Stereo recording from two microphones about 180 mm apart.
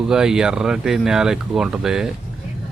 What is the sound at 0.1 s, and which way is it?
Speech, 5° right (ahead or behind).